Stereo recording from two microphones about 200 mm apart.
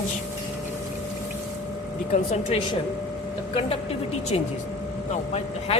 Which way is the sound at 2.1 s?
35° left (ahead or behind).